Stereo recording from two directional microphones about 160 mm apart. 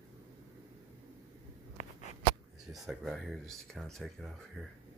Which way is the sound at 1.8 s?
50° left (ahead or behind).